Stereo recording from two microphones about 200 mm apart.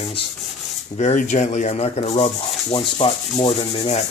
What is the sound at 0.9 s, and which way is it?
Rub, 35° left (ahead or behind).